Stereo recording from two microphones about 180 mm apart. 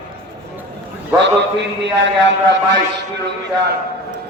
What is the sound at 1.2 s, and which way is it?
A man's voice, 75° right (ahead or behind).